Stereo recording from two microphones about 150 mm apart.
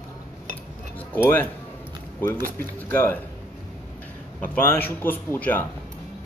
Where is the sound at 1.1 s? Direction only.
15° left (ahead or behind).